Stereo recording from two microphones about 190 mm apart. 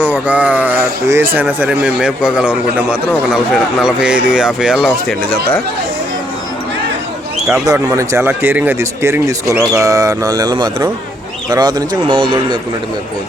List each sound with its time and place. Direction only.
0.0 s speech: 10° right (ahead or behind)
7.4 s a man's voice: centre (ahead or behind)
7.7 s speech: 15° right (ahead or behind)